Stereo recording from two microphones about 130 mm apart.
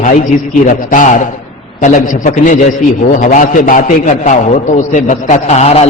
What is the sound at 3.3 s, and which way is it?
Speech, 90° left.